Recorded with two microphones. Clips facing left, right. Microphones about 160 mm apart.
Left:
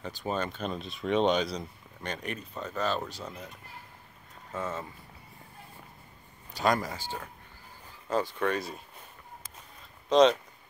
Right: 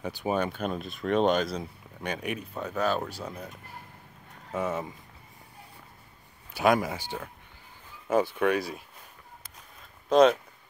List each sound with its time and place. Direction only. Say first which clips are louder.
0.0 s speech: right 4 dB; 10° right (ahead or behind)
4.6 s speech: right 5 dB; 15° right (ahead or behind)
6.5 s speech: right 4 dB; 10° right (ahead or behind)
8.4 s speech: right 4 dB; 5° right (ahead or behind)
10.0 s speech: right 1 dB; 5° right (ahead or behind)